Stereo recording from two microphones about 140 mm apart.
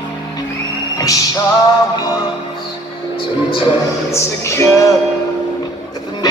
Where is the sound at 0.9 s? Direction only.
25° left (ahead or behind).